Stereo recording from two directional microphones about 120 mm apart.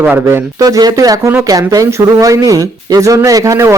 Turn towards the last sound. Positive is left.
turn(degrees=-25)  # may be behind; listen again after turning